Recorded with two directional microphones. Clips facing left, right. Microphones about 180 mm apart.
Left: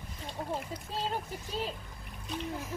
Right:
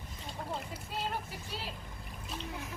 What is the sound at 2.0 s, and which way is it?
Speech, centre (ahead or behind).